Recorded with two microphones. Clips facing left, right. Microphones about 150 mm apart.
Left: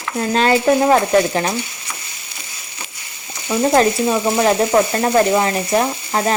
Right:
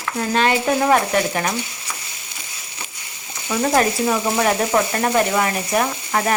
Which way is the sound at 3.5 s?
25° left (ahead or behind).